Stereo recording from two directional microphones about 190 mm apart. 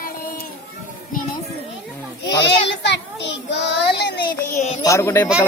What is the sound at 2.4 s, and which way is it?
Child singing, 65° left (ahead or behind).